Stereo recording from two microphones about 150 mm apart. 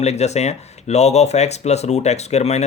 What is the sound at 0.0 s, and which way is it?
Speech, 45° left (ahead or behind).